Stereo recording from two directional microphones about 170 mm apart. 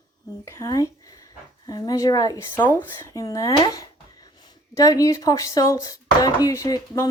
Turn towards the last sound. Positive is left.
turn(degrees=20)  # may be behind; listen again after turning